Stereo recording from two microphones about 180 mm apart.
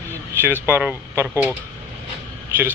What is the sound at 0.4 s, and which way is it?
Speech, 15° right (ahead or behind).